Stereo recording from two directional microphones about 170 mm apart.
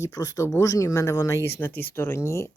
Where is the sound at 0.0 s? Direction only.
20° left (ahead or behind).